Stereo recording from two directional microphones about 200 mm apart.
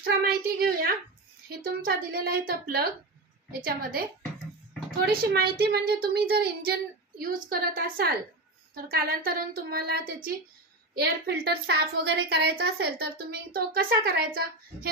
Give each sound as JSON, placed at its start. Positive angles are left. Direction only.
{"t": 0.6, "sound": "a woman's voice", "side_deg": -45}